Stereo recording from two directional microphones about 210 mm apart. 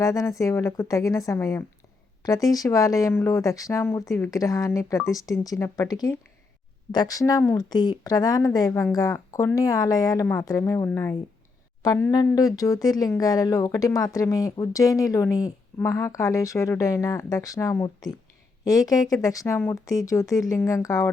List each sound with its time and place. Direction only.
0.0 s speech: 15° left (ahead or behind)